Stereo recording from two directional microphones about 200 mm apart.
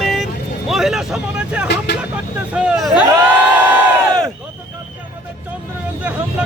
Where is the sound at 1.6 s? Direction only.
60° left (ahead or behind).